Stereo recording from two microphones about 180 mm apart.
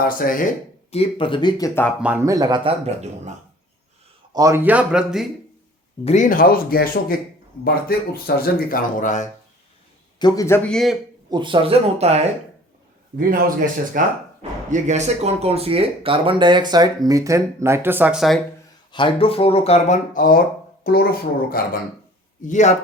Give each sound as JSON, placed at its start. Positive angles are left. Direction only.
{"t": 0.0, "sound": "speech", "side_deg": 50}
{"t": 0.9, "sound": "speech", "side_deg": 35}
{"t": 2.0, "sound": "speech", "side_deg": -10}
{"t": 4.3, "sound": "speech", "side_deg": -20}
{"t": 6.1, "sound": "speech", "side_deg": 45}
{"t": 10.2, "sound": "speech", "side_deg": 20}
{"t": 11.3, "sound": "speech", "side_deg": -25}
{"t": 13.1, "sound": "a man's voice", "side_deg": -70}
{"t": 14.0, "sound": "speech", "side_deg": -50}
{"t": 18.9, "sound": "speech", "side_deg": 25}
{"t": 20.1, "sound": "speech", "side_deg": 50}
{"t": 22.4, "sound": "speech", "side_deg": 45}